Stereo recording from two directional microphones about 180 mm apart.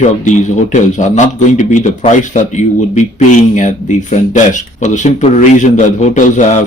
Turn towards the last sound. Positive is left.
turn(degrees=45)  # may be behind; listen again after turning